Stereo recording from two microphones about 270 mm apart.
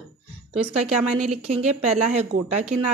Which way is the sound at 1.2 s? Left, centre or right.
Right.